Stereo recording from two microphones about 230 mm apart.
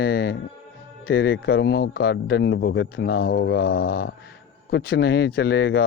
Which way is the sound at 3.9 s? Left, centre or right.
Left.